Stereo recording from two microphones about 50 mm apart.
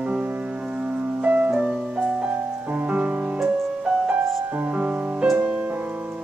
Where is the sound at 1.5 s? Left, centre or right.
Centre.